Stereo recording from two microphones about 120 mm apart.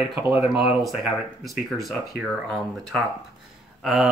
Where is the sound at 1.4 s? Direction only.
Centre (ahead or behind).